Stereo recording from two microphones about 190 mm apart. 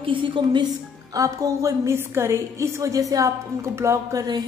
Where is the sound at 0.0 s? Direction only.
25° right (ahead or behind).